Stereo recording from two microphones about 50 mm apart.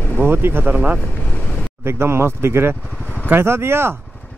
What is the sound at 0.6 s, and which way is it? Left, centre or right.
Speech, right.